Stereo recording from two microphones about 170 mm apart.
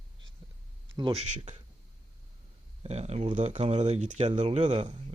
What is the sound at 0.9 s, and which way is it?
Speech, 30° right (ahead or behind).